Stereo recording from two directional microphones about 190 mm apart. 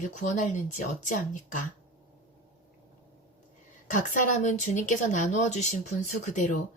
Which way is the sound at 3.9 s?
40° left (ahead or behind).